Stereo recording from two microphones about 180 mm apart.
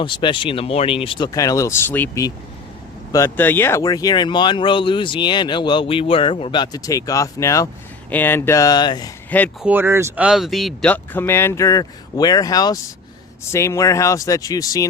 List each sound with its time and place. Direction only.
0.0 s speech: 25° left (ahead or behind)
9.6 s speech: 10° right (ahead or behind); by 14.8 s 20° left (ahead or behind)